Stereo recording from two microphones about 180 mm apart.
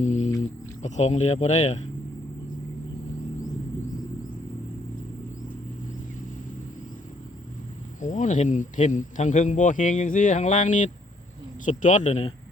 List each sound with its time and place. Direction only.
0.0 s a sound: 40° left (ahead or behind)
0.8 s speech: 40° left (ahead or behind)
8.0 s speech: 45° left (ahead or behind)